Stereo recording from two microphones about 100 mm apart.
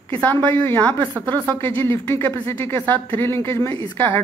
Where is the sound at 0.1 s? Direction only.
20° left (ahead or behind).